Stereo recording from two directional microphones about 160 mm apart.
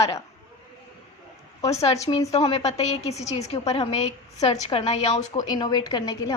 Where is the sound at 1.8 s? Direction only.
40° left (ahead or behind).